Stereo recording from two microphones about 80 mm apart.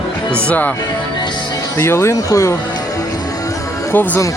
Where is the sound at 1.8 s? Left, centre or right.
Left.